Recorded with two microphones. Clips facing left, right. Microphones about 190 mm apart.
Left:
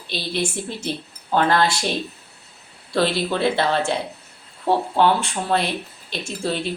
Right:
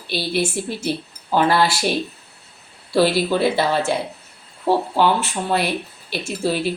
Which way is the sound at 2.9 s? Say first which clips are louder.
Right 4 dB; 5° right (ahead or behind).